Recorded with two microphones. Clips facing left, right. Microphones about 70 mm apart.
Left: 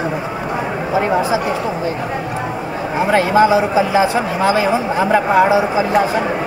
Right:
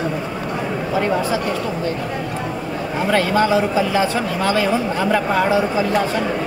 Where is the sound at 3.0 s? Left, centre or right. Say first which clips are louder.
Left 4 dB; centre.